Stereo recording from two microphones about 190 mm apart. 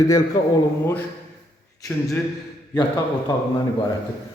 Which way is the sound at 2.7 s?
20° left (ahead or behind).